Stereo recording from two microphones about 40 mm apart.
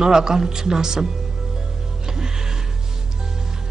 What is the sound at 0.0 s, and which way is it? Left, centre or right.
Speech, centre.